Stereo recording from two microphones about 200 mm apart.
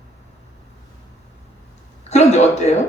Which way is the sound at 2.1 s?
35° left (ahead or behind).